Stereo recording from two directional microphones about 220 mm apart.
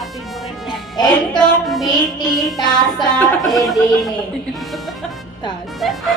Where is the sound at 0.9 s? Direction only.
20° left (ahead or behind).